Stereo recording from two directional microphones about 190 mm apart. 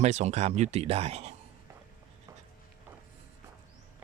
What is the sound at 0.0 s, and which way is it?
Speech, 35° right (ahead or behind).